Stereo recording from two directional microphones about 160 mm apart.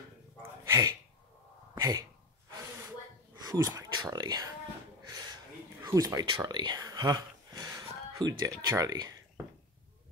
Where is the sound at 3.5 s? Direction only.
15° right (ahead or behind).